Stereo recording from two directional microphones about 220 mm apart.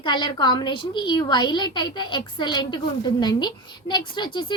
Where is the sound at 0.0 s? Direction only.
20° left (ahead or behind).